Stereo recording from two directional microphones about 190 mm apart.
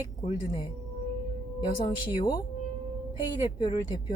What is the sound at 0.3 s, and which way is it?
Speech, 25° left (ahead or behind).